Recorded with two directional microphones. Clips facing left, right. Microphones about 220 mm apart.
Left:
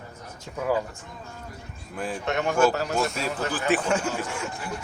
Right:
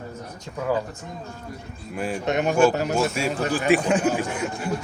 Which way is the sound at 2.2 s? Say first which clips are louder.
Right 3 dB; 20° right (ahead or behind).